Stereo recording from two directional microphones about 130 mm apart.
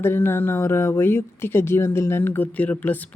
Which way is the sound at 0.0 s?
15° left (ahead or behind).